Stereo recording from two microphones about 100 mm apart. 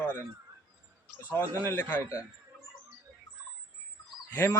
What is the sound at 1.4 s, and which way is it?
Speech, 25° left (ahead or behind).